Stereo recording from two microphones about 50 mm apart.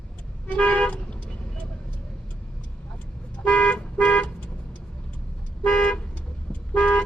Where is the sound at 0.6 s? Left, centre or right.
Left.